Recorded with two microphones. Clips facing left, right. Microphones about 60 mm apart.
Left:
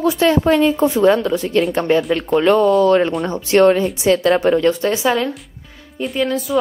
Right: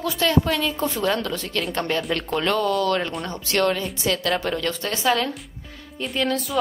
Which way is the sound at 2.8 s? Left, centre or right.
Left.